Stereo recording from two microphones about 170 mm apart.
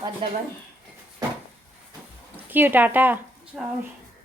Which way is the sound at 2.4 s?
10° right (ahead or behind).